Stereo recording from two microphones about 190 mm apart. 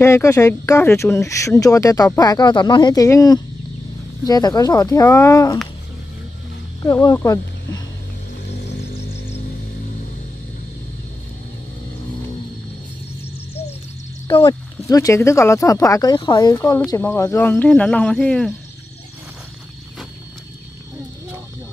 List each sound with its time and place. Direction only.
0.0 s speech: 15° left (ahead or behind)
6.8 s speech: 20° left (ahead or behind)
14.2 s speech: 20° left (ahead or behind); by 18.5 s 5° left (ahead or behind)